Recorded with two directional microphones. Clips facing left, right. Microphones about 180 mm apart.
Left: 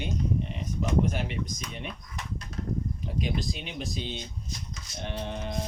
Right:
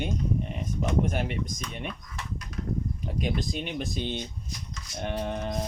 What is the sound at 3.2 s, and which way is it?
Speech, 50° right (ahead or behind).